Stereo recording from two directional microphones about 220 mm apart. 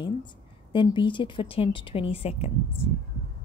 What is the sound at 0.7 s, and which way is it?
A woman's voice, 20° left (ahead or behind).